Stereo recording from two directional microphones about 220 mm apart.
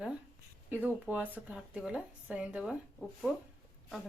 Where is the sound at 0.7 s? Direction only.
5° right (ahead or behind).